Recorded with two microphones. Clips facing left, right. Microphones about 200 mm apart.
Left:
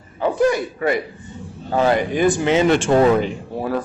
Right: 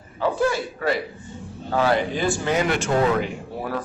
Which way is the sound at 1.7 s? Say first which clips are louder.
Left 3 dB; 20° left (ahead or behind).